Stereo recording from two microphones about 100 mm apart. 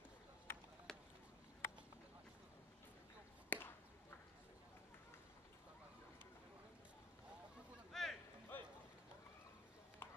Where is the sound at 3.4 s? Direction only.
20° left (ahead or behind).